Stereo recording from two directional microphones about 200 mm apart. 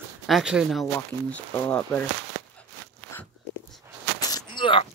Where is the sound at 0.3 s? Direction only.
5° right (ahead or behind).